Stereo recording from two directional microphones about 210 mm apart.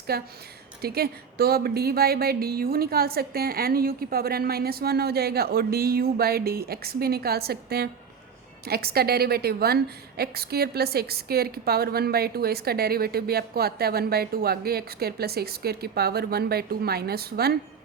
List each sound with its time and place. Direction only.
0.1 s a woman's voice: 50° right (ahead or behind)